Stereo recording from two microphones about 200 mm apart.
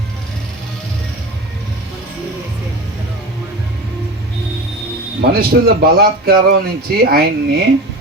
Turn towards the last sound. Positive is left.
turn(degrees=-50)  # may be behind; listen again after turning